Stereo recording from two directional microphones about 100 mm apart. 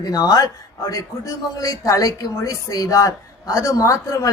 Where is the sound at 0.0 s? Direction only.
40° left (ahead or behind).